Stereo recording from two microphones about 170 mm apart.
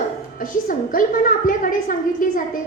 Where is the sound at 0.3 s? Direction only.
55° left (ahead or behind).